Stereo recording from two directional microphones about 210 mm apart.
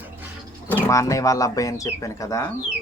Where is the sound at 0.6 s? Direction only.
10° left (ahead or behind).